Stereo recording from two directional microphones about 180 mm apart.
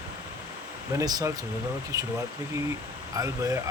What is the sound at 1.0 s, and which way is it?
Speech, 20° right (ahead or behind).